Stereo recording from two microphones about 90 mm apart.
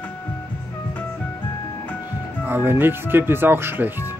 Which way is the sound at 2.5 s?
25° right (ahead or behind).